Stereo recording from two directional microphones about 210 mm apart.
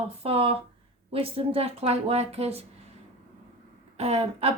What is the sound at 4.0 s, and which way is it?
Speech, 30° right (ahead or behind).